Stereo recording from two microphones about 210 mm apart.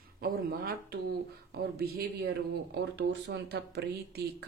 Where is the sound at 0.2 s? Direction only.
50° right (ahead or behind).